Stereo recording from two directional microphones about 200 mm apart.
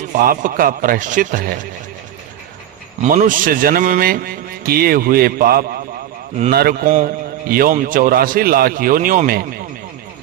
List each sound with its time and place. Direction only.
0.1 s a man's voice: 45° right (ahead or behind)
3.0 s a man's voice: 40° right (ahead or behind)